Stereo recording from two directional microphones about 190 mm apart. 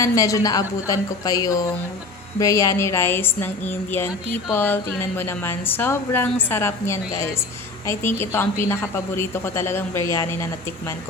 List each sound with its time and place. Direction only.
0.0 s a woman's voice: 15° left (ahead or behind)